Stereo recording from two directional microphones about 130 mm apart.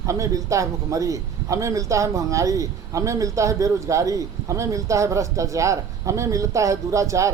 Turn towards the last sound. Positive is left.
turn(degrees=-25)  # may be behind; listen again after turning